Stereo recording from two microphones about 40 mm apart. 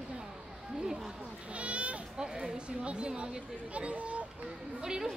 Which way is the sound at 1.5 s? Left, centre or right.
Right.